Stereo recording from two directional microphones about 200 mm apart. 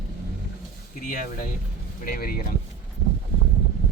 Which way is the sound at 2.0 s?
45° left (ahead or behind).